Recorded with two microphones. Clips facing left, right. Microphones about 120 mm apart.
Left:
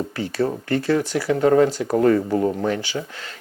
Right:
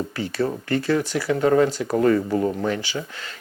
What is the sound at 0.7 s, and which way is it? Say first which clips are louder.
Speech: left 1 dB; 45° left (ahead or behind).